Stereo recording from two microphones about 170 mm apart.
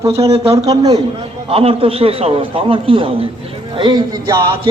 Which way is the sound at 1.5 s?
30° right (ahead or behind).